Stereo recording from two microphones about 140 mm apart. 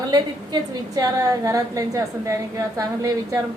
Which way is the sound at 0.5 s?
30° right (ahead or behind).